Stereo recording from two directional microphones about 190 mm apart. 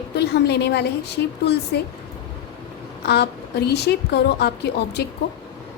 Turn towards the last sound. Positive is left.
turn(degrees=55)  # may be behind; listen again after turning